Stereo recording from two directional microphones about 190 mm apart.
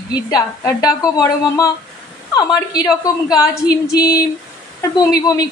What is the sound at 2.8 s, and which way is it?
Speech, 20° left (ahead or behind).